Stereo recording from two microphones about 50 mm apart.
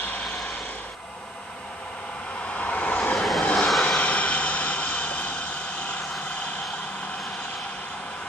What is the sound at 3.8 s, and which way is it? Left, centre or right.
Vehicle, left.